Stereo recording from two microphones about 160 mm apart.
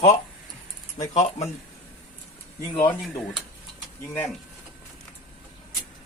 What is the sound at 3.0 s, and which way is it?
Speech, centre (ahead or behind).